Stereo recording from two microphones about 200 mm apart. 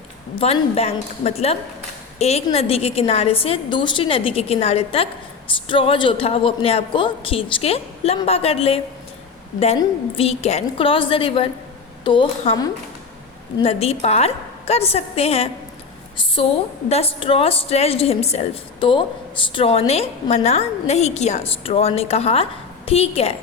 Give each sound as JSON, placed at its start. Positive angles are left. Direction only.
{"t": 0.3, "sound": "a woman's voice", "side_deg": 30}